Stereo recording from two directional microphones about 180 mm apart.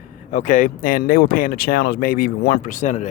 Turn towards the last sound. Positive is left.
turn(degrees=45)  # may be behind; listen again after turning